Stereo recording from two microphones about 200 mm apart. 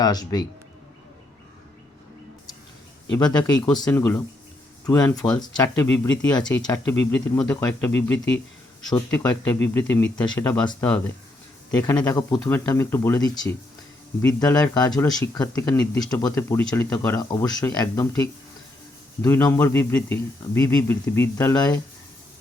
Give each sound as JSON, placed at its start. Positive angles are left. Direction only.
{"t": 0.0, "sound": "speech", "side_deg": 20}
{"t": 3.2, "sound": "speech", "side_deg": 20}
{"t": 8.1, "sound": "speech", "side_deg": 65}
{"t": 8.9, "sound": "speech", "side_deg": 15}
{"t": 14.2, "sound": "speech", "side_deg": 5}
{"t": 14.4, "sound": "speech", "side_deg": 15}
{"t": 19.2, "sound": "speech", "side_deg": 10}